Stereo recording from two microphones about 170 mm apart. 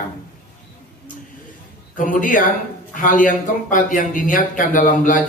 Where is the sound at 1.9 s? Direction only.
50° left (ahead or behind).